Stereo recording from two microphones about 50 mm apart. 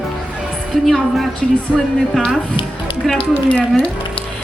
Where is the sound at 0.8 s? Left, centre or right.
Centre.